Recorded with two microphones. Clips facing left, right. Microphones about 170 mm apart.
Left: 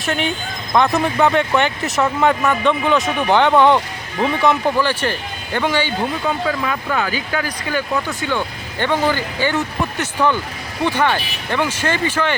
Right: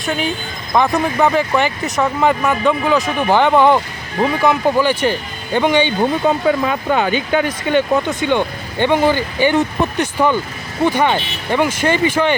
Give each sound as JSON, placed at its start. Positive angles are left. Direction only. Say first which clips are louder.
{"t": 0.0, "sound": "speech", "louder": "right 1 dB", "side_deg": 0}
{"t": 4.2, "sound": "speech", "louder": "right 2 dB", "side_deg": -35}
{"t": 4.8, "sound": "speech", "louder": "right 4 dB", "side_deg": -15}